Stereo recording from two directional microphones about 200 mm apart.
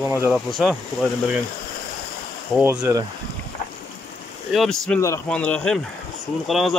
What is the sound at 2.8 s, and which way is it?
Speech, 20° right (ahead or behind).